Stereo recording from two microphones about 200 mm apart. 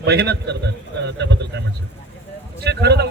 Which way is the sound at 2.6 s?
55° right (ahead or behind).